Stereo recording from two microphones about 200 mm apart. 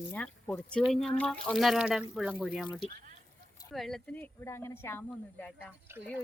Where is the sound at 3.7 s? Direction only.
Centre (ahead or behind).